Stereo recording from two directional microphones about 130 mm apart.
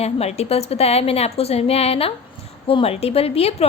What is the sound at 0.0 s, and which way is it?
A woman's voice, 55° left (ahead or behind).